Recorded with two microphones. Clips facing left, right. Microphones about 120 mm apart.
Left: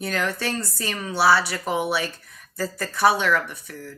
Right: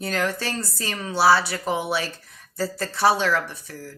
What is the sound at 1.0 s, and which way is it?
Speech, 25° right (ahead or behind).